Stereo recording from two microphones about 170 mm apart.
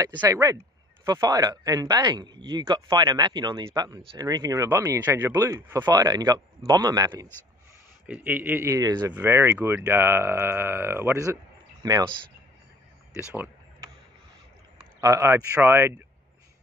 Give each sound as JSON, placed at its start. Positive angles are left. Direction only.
{"t": 0.3, "sound": "speech", "side_deg": -20}
{"t": 8.1, "sound": "speech", "side_deg": -10}
{"t": 15.0, "sound": "speech", "side_deg": -20}